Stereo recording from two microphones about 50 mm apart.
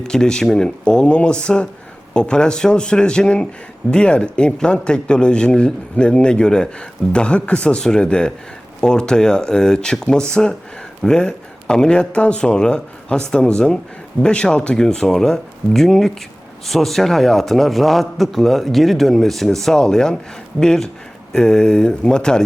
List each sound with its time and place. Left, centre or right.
0.0 s a man's voice: centre